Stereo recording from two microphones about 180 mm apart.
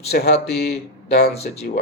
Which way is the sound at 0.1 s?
65° left (ahead or behind).